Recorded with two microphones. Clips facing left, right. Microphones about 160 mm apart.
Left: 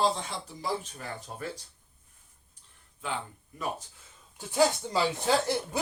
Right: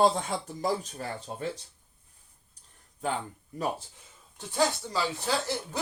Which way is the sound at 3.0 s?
40° right (ahead or behind).